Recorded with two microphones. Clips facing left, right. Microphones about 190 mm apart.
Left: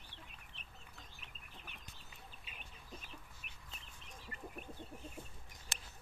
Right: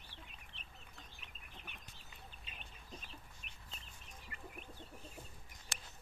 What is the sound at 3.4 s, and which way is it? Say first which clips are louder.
Chicken: even; 55° left (ahead or behind).